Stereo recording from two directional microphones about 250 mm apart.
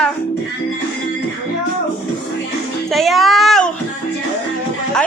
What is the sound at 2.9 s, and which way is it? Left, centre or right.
Child singing, centre.